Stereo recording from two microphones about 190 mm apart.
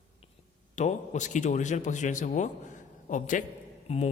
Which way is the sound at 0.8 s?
40° left (ahead or behind).